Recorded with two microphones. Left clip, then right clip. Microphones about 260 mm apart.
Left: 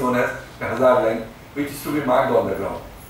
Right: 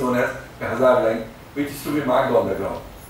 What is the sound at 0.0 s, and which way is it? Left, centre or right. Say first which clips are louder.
A man's voice: left 1 dB; centre.